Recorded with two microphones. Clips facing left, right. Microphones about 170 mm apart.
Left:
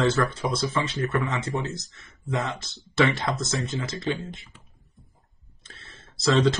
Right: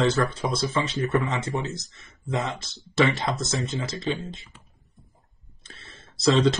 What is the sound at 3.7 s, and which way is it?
Speech, 20° right (ahead or behind).